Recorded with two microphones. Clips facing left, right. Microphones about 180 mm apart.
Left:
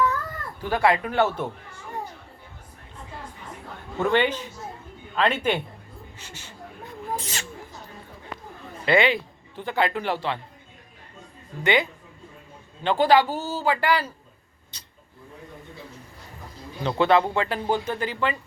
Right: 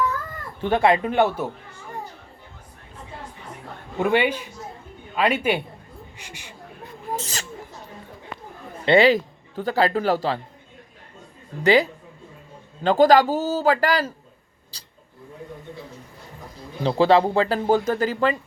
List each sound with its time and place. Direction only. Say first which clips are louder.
0.6 s a man's voice: right 3 dB; 25° right (ahead or behind)
4.0 s a man's voice: right 2 dB; 10° right (ahead or behind)
7.2 s speech: right 2 dB; 35° right (ahead or behind)
8.9 s speech: right 5 dB; 35° right (ahead or behind)
11.6 s speech: right 5 dB; 35° right (ahead or behind)
14.7 s a sound: right 1 dB; 30° right (ahead or behind)
16.8 s speech: right 3 dB; 30° right (ahead or behind)